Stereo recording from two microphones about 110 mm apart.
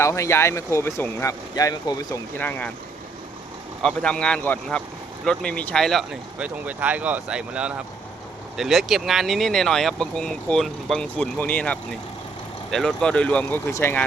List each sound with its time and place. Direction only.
0.0 s speech: 25° left (ahead or behind)
2.4 s speech: 15° left (ahead or behind)
3.8 s speech: 10° left (ahead or behind)
6.4 s speech: 15° right (ahead or behind); by 13.6 s 10° left (ahead or behind)
13.7 s speech: 25° left (ahead or behind)